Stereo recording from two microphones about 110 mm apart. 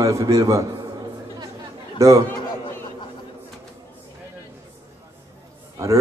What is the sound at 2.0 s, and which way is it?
Speech, 25° right (ahead or behind).